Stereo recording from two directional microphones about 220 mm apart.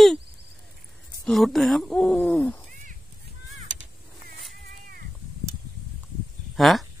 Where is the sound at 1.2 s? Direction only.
Centre (ahead or behind).